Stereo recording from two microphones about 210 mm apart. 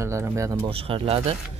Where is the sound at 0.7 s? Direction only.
25° right (ahead or behind).